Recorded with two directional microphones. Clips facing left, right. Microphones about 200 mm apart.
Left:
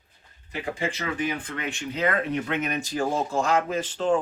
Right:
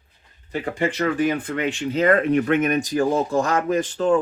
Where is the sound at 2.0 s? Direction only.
50° right (ahead or behind).